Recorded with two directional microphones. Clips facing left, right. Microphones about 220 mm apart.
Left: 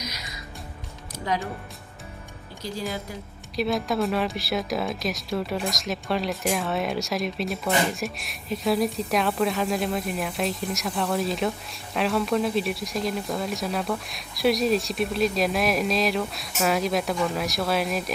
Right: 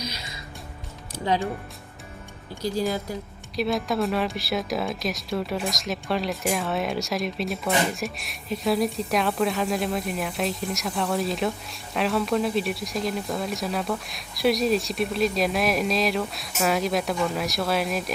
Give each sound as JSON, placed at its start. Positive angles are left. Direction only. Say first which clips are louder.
{"t": 0.0, "sound": "music", "louder": "right 2 dB", "side_deg": -30}
{"t": 1.3, "sound": "speech", "louder": "right 3 dB", "side_deg": -30}
{"t": 2.6, "sound": "speech", "louder": "right 6 dB", "side_deg": -40}
{"t": 3.5, "sound": "speech", "louder": "even", "side_deg": 0}